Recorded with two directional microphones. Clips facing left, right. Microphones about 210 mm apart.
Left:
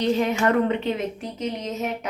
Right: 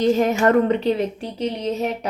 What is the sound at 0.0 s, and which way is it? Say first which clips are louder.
A woman's voice: right 4 dB; 45° right (ahead or behind).